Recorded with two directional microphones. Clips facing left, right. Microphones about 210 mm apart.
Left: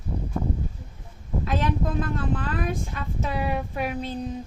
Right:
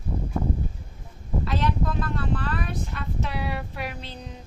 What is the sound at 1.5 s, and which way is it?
Vehicle, 45° left (ahead or behind).